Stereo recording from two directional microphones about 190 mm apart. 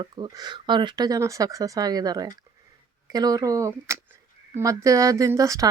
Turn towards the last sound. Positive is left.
turn(degrees=-15)  # may be behind; listen again after turning